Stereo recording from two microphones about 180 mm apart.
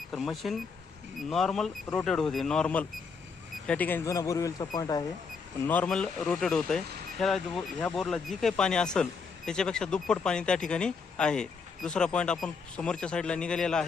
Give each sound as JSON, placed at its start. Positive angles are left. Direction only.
{"t": 0.1, "sound": "speech", "side_deg": 0}
{"t": 5.6, "sound": "speech", "side_deg": 10}